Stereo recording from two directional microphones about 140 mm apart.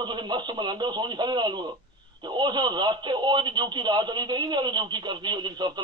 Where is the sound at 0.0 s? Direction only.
30° right (ahead or behind).